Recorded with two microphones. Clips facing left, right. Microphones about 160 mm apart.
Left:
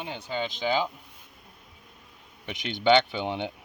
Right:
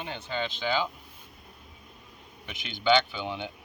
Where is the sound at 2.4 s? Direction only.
70° left (ahead or behind).